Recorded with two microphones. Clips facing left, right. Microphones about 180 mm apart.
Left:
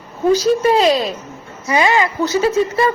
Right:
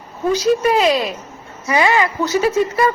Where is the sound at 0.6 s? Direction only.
30° left (ahead or behind).